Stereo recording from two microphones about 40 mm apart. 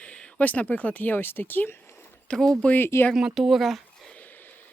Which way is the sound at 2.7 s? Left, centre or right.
Left.